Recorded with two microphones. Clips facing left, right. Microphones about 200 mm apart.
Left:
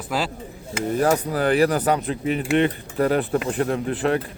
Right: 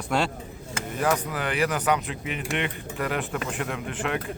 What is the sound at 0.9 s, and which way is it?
Speech, 35° left (ahead or behind).